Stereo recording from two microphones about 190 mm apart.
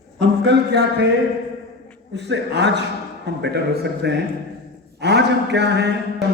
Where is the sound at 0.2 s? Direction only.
60° right (ahead or behind).